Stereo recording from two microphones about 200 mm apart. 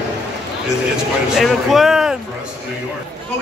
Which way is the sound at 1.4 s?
Centre (ahead or behind).